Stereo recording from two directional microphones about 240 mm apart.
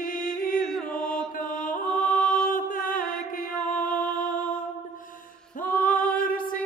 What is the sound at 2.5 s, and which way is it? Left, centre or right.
Music, left.